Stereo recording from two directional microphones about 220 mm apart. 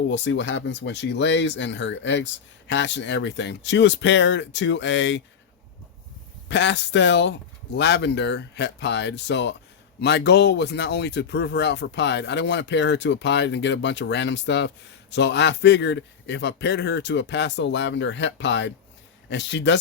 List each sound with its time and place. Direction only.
0.1 s speech: 55° left (ahead or behind)
6.5 s speech: 55° left (ahead or behind)